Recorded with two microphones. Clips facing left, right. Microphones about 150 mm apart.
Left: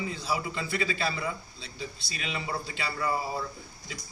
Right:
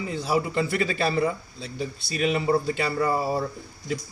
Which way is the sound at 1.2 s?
45° right (ahead or behind).